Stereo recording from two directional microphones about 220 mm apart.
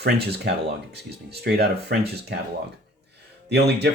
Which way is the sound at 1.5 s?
45° right (ahead or behind).